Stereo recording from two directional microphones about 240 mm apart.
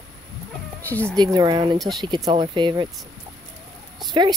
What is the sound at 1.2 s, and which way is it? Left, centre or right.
Speech, centre.